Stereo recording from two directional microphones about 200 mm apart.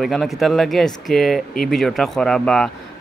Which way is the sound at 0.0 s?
Centre (ahead or behind).